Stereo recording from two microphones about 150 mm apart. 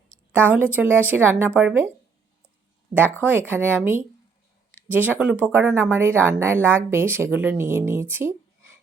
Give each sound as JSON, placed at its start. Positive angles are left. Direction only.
{"t": 0.3, "sound": "speech", "side_deg": -10}
{"t": 2.9, "sound": "speech", "side_deg": -40}
{"t": 3.5, "sound": "speech", "side_deg": -15}